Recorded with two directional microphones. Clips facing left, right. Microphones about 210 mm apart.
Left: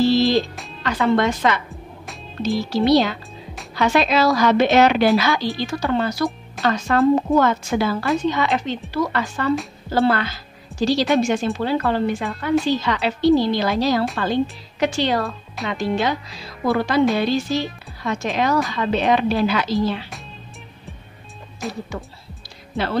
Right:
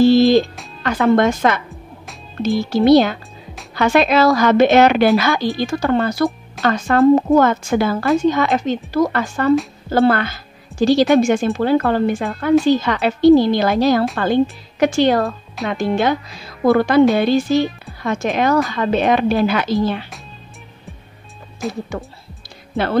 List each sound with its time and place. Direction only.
0.0 s music: 50° right (ahead or behind)
0.8 s a woman's voice: 50° right (ahead or behind)
21.6 s speech: centre (ahead or behind)